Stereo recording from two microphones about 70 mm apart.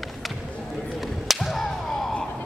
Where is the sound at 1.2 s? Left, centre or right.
Centre.